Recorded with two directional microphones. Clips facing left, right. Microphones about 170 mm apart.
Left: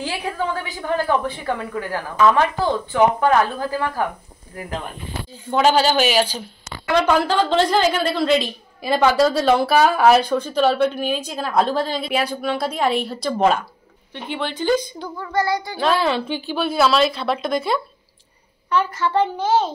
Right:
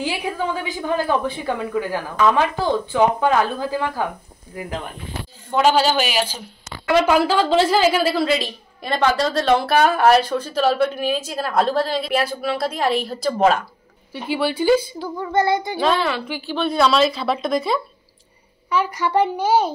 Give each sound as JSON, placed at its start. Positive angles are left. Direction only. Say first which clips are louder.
{"t": 0.0, "sound": "a woman's voice", "louder": "right 1 dB", "side_deg": -15}
{"t": 5.5, "sound": "a woman's voice", "louder": "even", "side_deg": -5}
{"t": 15.1, "sound": "child singing", "louder": "right 3 dB", "side_deg": -20}
{"t": 16.0, "sound": "a woman's voice", "louder": "left 2 dB", "side_deg": 25}
{"t": 16.5, "sound": "a woman's voice", "louder": "right 1 dB", "side_deg": 5}
{"t": 18.7, "sound": "a woman's voice", "louder": "even", "side_deg": -10}